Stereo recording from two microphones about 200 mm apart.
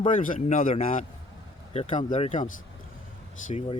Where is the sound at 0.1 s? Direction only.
40° left (ahead or behind).